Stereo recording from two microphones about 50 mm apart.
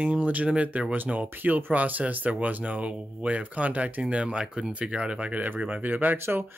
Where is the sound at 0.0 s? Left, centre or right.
Right.